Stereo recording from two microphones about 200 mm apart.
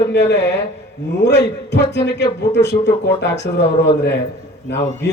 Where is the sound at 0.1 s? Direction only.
60° left (ahead or behind).